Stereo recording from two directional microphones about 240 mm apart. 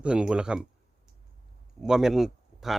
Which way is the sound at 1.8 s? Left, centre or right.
Centre.